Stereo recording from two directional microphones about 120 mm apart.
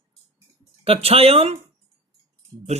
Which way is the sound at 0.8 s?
55° right (ahead or behind).